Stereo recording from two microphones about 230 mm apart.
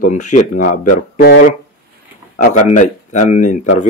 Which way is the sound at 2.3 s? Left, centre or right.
Left.